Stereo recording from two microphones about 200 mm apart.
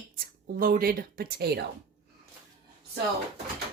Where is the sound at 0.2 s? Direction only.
45° right (ahead or behind).